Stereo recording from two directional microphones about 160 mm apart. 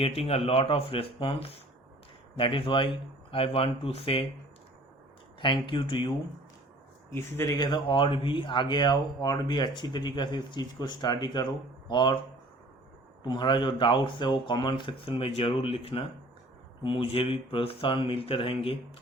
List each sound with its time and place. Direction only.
0.0 s speech: 40° left (ahead or behind)
5.4 s speech: 30° left (ahead or behind)
7.1 s speech: 15° left (ahead or behind)
13.2 s speech: 30° left (ahead or behind)